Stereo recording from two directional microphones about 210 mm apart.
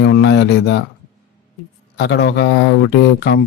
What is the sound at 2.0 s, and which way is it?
Speech, 50° left (ahead or behind).